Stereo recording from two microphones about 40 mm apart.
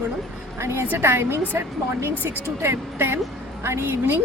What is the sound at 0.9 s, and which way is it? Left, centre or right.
A woman's voice, right.